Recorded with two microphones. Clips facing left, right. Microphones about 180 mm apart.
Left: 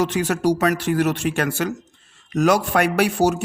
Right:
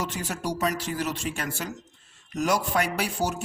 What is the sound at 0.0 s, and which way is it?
A man's voice, 75° left (ahead or behind).